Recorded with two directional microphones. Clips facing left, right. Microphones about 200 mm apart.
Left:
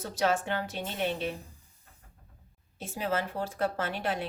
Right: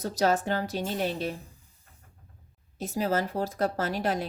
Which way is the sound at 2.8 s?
40° right (ahead or behind).